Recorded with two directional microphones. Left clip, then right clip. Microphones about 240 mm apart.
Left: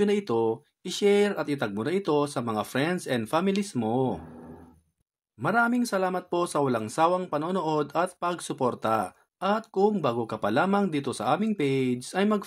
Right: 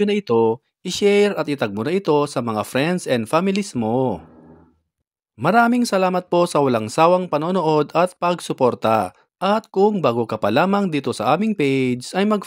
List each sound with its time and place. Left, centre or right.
0.0 s speech: right
5.4 s speech: right